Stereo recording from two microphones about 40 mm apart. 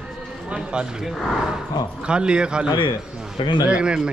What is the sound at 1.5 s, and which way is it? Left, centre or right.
Speech, right.